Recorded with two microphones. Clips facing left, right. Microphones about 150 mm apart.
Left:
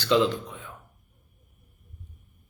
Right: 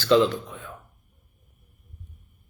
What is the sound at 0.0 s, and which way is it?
Speech, 15° left (ahead or behind).